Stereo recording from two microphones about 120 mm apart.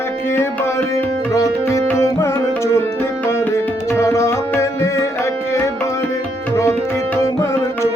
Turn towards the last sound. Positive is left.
turn(degrees=25)  # may be behind; listen again after turning